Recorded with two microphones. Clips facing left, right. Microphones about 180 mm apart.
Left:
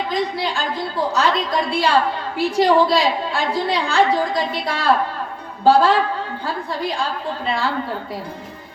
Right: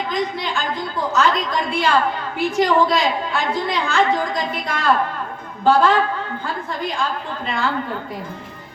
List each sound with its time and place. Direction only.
0.1 s a woman's voice: 35° left (ahead or behind)